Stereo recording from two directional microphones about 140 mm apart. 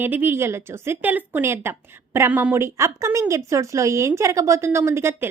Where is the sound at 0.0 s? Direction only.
15° right (ahead or behind).